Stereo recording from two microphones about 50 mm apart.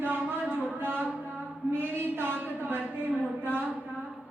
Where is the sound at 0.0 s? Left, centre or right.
Right.